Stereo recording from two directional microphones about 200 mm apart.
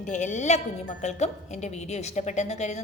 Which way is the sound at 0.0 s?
35° left (ahead or behind).